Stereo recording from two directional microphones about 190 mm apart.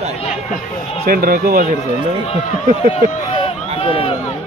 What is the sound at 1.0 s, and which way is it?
Speech, 50° right (ahead or behind).